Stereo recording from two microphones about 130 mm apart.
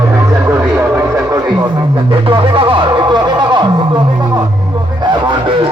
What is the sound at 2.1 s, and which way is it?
Music, 40° right (ahead or behind).